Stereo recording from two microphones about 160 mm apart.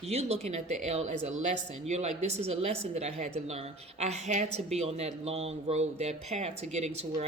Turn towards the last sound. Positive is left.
turn(degrees=-45)  # may be behind; listen again after turning